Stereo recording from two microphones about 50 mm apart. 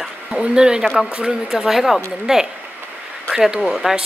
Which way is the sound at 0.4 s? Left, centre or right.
Centre.